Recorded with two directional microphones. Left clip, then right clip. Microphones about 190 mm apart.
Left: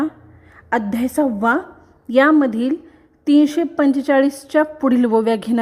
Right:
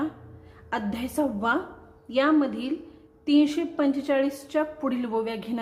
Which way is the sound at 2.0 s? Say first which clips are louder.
Left 9 dB; 45° left (ahead or behind).